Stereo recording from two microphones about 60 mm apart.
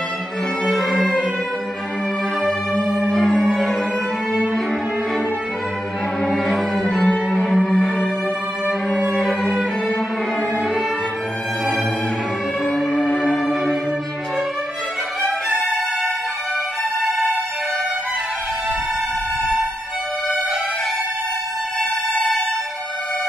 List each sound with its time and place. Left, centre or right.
0.7 s music: centre
3.0 s music: centre
6.2 s cello: centre
7.2 s music: centre
9.0 s music: centre
12.6 s music: centre